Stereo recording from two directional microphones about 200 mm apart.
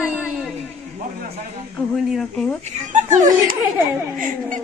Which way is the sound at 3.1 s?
40° right (ahead or behind).